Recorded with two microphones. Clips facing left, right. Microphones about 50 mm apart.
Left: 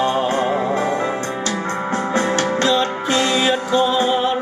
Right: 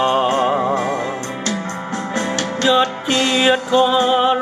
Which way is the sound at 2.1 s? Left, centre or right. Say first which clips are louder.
Left 2 dB; left.